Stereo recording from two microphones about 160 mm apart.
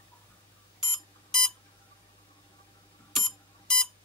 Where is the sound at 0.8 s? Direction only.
Centre (ahead or behind).